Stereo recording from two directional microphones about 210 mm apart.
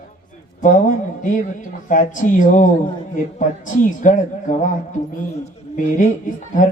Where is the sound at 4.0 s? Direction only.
35° left (ahead or behind).